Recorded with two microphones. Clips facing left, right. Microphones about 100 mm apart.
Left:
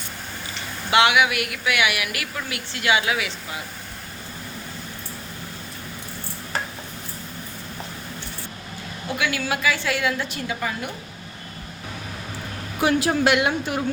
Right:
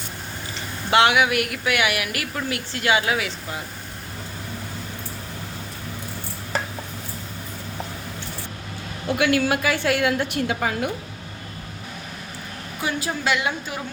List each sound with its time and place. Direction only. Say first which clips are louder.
0.9 s a woman's voice: right 1 dB; 35° right (ahead or behind)
9.1 s a woman's voice: right 5 dB; 55° right (ahead or behind); by 10.8 s 85° right
12.8 s speech: left 6 dB; 75° left (ahead or behind)